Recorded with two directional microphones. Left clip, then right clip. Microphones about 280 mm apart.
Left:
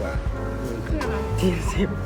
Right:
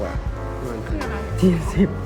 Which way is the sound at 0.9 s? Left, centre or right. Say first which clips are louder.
Left 3 dB; centre.